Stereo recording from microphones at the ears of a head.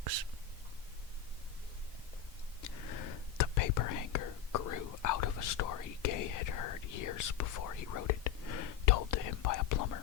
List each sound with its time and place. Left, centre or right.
2.6 s whispering: left